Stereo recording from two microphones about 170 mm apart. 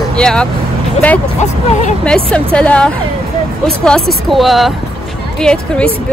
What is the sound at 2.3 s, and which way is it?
Speech, 5° left (ahead or behind).